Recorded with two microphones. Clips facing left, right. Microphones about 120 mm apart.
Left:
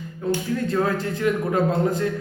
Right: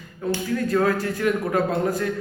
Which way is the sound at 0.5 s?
25° left (ahead or behind).